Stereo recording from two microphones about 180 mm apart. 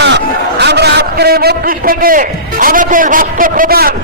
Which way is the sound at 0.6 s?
65° right (ahead or behind).